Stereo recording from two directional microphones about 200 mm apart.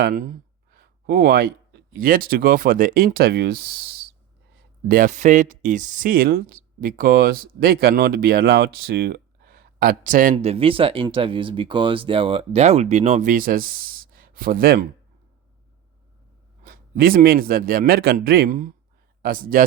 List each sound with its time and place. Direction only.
0.0 s speech: 40° right (ahead or behind)
0.8 s a sound: 50° right (ahead or behind)
2.0 s speech: 45° right (ahead or behind)
10.3 s speech: 30° right (ahead or behind); by 14.8 s 45° right (ahead or behind)
16.6 s speech: 45° right (ahead or behind)